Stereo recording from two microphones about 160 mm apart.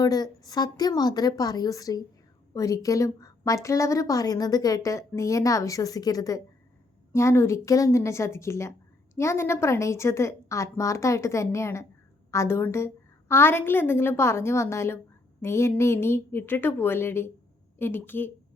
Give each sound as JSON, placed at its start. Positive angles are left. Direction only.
{"t": 0.0, "sound": "a woman's voice", "side_deg": 25}